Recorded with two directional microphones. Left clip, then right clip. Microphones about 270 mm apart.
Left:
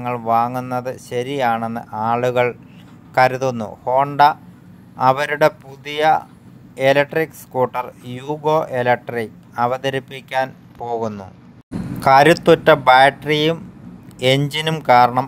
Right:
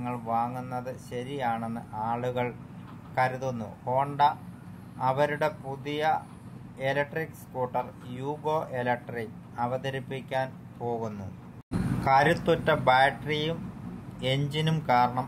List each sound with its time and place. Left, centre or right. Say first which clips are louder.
0.0 s speech: left 12 dB; left
12.0 s speech: left 12 dB; left